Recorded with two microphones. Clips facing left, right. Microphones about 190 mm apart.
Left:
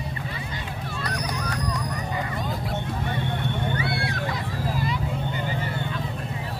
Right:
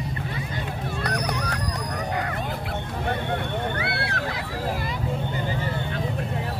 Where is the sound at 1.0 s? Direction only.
60° right (ahead or behind).